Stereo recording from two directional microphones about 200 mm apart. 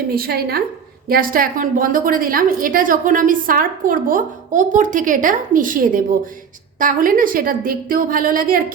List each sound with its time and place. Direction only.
0.1 s a woman's voice: 50° right (ahead or behind)